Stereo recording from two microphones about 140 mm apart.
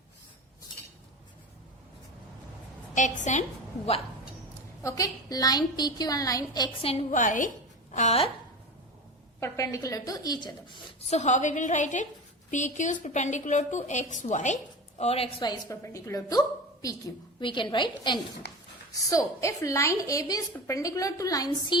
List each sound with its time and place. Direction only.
2.9 s a woman's voice: 60° left (ahead or behind)
4.8 s a woman's voice: 25° left (ahead or behind)
6.8 s a woman's voice: 55° left (ahead or behind)
9.4 s a woman's voice: 25° left (ahead or behind)
11.0 s a woman's voice: 55° left (ahead or behind); by 16.4 s 25° left (ahead or behind)
17.4 s a woman's voice: 35° left (ahead or behind)
18.9 s a woman's voice: 25° left (ahead or behind)